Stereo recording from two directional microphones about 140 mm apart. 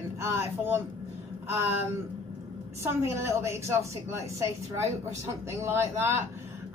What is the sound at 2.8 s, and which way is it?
A woman's voice, 20° right (ahead or behind).